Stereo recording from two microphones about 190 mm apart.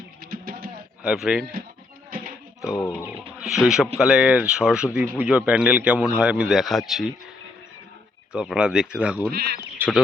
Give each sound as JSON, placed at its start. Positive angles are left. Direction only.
{"t": 0.3, "sound": "music", "side_deg": -50}
{"t": 1.0, "sound": "a man's voice", "side_deg": -5}
{"t": 2.6, "sound": "speech", "side_deg": 15}
{"t": 3.0, "sound": "a man's voice", "side_deg": -5}
{"t": 8.3, "sound": "a man's voice", "side_deg": -5}
{"t": 9.3, "sound": "speech", "side_deg": -55}
{"t": 9.7, "sound": "bird", "side_deg": -10}